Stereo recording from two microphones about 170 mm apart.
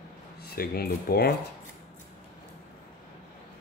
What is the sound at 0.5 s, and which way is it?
Speech, 65° left (ahead or behind).